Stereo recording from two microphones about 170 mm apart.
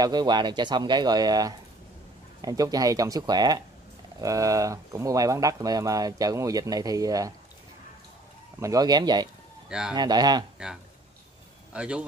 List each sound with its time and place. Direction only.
0.0 s speech: 25° right (ahead or behind)
8.5 s speech: 20° right (ahead or behind)
9.7 s speech: 5° right (ahead or behind)
9.9 s speech: 25° right (ahead or behind)
11.7 s a man's voice: 5° right (ahead or behind)